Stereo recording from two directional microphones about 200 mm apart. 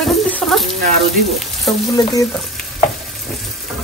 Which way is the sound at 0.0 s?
Centre (ahead or behind).